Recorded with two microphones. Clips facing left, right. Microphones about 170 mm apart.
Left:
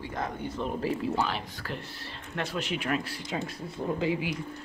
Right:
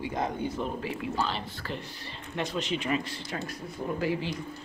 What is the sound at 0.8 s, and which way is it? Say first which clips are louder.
Speech: left 4 dB; 40° left (ahead or behind).